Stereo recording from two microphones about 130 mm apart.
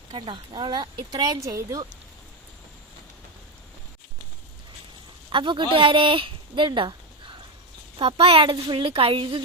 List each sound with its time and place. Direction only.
0.1 s speech: 40° right (ahead or behind); by 1.8 s 25° right (ahead or behind)
5.3 s speech: 40° right (ahead or behind)
7.9 s a woman's voice: 40° right (ahead or behind)